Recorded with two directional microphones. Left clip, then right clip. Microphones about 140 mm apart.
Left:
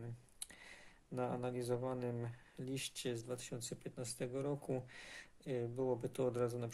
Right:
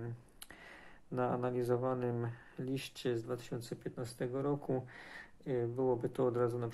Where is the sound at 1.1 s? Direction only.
25° left (ahead or behind).